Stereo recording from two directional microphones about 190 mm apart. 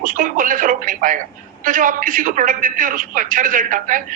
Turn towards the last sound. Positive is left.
turn(degrees=-45)  # may be behind; listen again after turning